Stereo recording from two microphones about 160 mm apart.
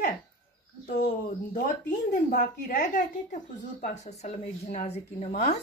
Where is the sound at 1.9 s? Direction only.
50° left (ahead or behind).